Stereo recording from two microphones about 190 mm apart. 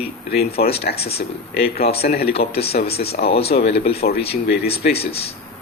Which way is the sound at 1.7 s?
55° left (ahead or behind).